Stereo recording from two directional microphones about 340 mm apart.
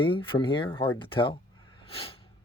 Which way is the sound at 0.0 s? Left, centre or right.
Centre.